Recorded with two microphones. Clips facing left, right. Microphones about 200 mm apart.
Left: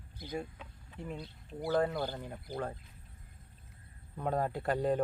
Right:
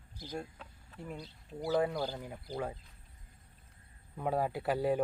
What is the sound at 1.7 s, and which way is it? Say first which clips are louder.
Speech: even; centre (ahead or behind).